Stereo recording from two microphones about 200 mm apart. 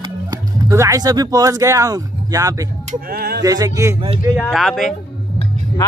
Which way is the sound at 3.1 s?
50° right (ahead or behind).